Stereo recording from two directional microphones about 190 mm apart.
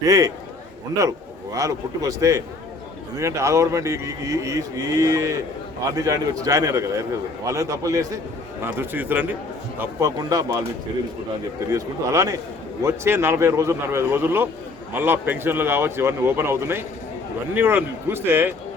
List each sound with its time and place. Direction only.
0.0 s a man's voice: 20° right (ahead or behind)
1.5 s a man's voice: 20° right (ahead or behind)
11.7 s a man's voice: 15° right (ahead or behind)